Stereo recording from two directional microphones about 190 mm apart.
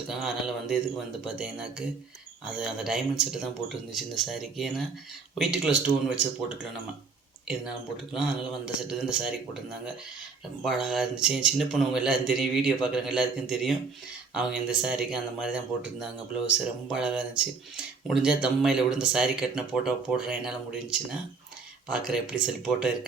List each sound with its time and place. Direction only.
0.1 s speech: centre (ahead or behind)
8.1 s speech: 5° right (ahead or behind)
10.6 s speech: centre (ahead or behind)